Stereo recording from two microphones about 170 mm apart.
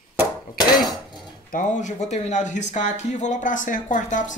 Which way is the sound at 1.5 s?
50° left (ahead or behind).